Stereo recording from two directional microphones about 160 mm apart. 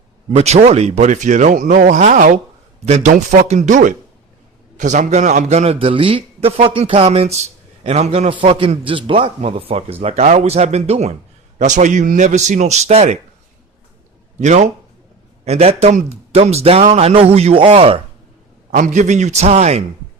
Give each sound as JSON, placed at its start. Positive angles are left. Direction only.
{"t": 0.3, "sound": "a man's voice", "side_deg": -40}
{"t": 14.4, "sound": "a man's voice", "side_deg": -45}
{"t": 18.7, "sound": "speech", "side_deg": -50}